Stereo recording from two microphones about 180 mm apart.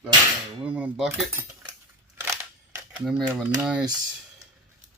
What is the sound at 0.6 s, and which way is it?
Cutlery, 10° right (ahead or behind).